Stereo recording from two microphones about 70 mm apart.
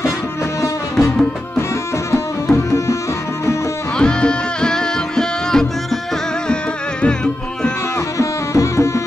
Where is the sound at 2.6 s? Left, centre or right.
Left.